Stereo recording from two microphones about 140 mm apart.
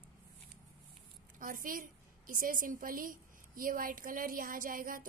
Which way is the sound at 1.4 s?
75° right (ahead or behind).